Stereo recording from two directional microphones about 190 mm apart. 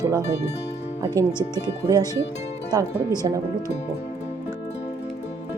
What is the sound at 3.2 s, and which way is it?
Speech, 25° right (ahead or behind).